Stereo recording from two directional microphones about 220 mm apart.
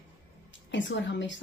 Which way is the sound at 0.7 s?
55° left (ahead or behind).